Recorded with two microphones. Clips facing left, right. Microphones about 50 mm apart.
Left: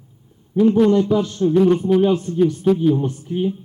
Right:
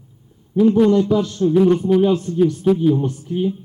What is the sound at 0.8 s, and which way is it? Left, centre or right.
A man's voice, centre.